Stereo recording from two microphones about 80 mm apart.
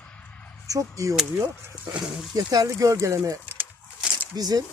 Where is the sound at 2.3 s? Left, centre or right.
Right.